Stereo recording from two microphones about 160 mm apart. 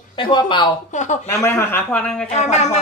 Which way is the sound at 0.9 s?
50° left (ahead or behind).